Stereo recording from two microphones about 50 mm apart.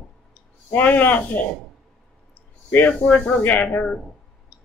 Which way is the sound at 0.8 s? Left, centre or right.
Left.